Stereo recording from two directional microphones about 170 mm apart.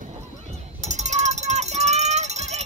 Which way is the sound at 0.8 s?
40° right (ahead or behind).